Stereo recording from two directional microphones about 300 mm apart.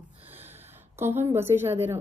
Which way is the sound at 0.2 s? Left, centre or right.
Centre.